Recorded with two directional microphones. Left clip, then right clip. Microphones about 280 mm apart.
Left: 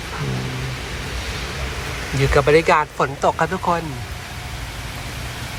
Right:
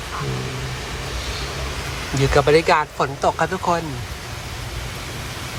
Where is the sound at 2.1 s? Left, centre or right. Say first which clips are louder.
Left 1 dB; centre.